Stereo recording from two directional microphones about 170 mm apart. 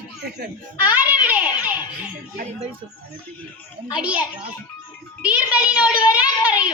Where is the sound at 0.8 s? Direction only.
10° right (ahead or behind).